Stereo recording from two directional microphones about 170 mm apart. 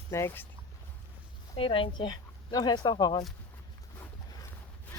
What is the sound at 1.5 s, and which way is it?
Speech, 30° left (ahead or behind).